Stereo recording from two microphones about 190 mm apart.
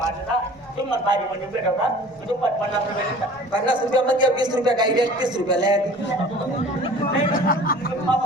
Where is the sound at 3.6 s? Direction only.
25° right (ahead or behind).